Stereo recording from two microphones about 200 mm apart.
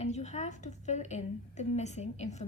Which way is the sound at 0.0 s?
35° left (ahead or behind).